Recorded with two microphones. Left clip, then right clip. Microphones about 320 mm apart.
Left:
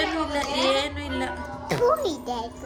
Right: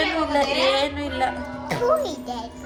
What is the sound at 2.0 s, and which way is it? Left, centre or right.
Speech, centre.